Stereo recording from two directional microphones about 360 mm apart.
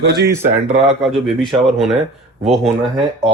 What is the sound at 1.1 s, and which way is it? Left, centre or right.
Speech, centre.